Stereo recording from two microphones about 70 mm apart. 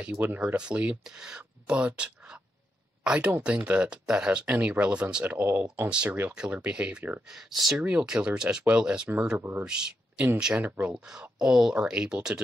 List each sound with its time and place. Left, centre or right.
0.1 s speech: right
0.4 s speech: centre
3.0 s a sound: centre
3.4 s speech: centre
6.3 s speech: centre
7.2 s speech: centre
7.7 s speech: centre
9.4 s speech: right
9.7 s speech: centre
10.5 s speech: right
10.9 s speech: centre